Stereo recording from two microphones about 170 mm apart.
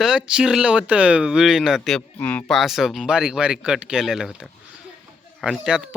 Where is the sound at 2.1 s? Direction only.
10° left (ahead or behind).